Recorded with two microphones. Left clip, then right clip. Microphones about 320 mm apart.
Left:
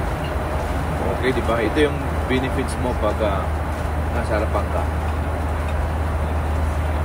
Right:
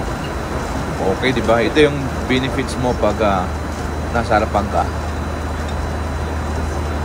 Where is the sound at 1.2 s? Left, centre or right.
Right.